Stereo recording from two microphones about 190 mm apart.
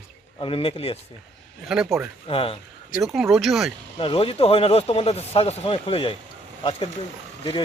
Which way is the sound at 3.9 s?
30° left (ahead or behind).